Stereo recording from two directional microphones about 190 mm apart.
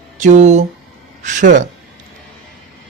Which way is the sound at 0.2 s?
40° right (ahead or behind).